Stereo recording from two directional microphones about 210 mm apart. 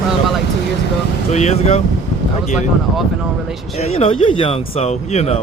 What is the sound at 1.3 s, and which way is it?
Speech, 30° left (ahead or behind).